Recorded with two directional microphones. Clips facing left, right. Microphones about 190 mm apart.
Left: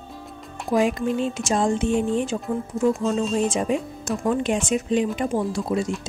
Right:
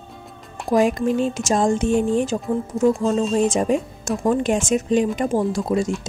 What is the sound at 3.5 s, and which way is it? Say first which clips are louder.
Speech: right 3 dB; 45° right (ahead or behind).